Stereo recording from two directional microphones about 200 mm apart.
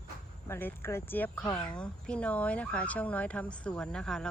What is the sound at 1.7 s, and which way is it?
Speech, 5° left (ahead or behind).